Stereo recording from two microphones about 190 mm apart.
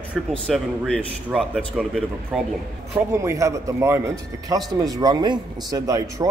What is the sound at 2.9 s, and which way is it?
Speech, 15° right (ahead or behind).